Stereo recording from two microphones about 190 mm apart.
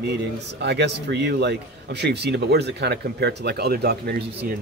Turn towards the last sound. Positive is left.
turn(degrees=-55)  # may be behind; listen again after turning